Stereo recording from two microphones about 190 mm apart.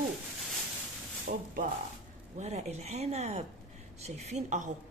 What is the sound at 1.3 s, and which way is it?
A woman's voice, 45° right (ahead or behind).